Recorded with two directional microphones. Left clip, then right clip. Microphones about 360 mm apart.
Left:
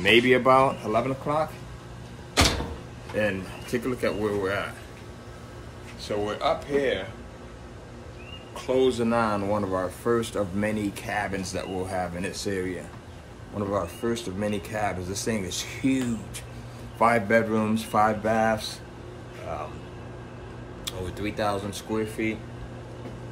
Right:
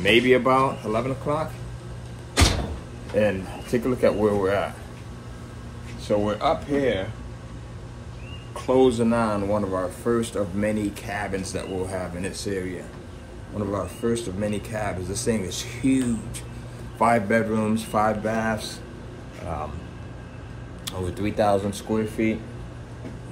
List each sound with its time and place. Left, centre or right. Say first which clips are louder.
0.0 s a man's voice: right 1 dB; centre
3.2 s speech: right 4 dB; centre
6.0 s speech: right 4 dB; centre
8.5 s speech: right 4 dB; centre
8.9 s speech: right 1 dB; centre
21.2 s a man's voice: right 7 dB; centre